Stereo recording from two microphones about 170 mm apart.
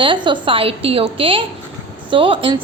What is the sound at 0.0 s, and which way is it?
A woman's voice, 30° right (ahead or behind).